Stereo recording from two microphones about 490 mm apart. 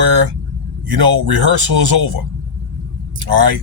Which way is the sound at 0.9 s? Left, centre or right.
Right.